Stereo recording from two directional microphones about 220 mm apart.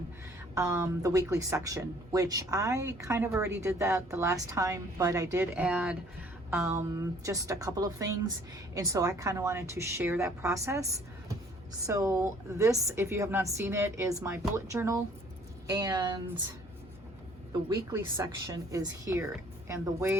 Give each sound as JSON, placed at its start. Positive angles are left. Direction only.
{"t": 0.5, "sound": "speech", "side_deg": -15}
{"t": 11.9, "sound": "speech", "side_deg": -15}
{"t": 17.9, "sound": "speech", "side_deg": -15}